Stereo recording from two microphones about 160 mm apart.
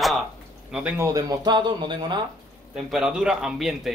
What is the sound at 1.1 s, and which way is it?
Speech, 20° right (ahead or behind).